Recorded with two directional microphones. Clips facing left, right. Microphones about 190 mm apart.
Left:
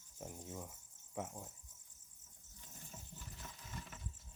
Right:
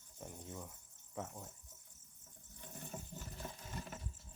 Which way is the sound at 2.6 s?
65° right (ahead or behind).